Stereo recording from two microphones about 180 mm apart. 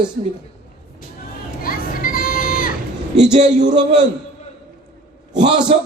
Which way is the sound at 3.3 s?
40° right (ahead or behind).